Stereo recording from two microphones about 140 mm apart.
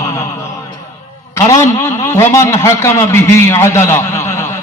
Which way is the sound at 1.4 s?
20° left (ahead or behind).